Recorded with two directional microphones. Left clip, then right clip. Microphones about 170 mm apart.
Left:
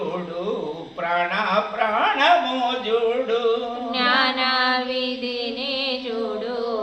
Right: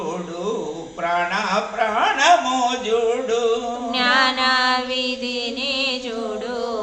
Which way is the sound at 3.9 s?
30° right (ahead or behind).